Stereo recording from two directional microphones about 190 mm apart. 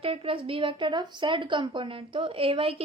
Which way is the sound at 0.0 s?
30° right (ahead or behind).